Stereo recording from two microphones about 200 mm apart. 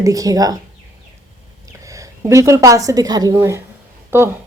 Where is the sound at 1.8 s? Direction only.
15° right (ahead or behind).